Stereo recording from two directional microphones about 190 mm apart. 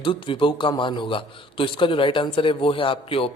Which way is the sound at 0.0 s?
25° left (ahead or behind).